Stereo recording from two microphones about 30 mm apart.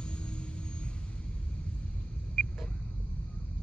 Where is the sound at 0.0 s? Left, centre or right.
Left.